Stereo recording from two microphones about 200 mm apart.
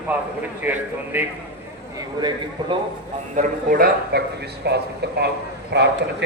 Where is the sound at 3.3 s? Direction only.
40° right (ahead or behind); by 5.9 s 55° right (ahead or behind).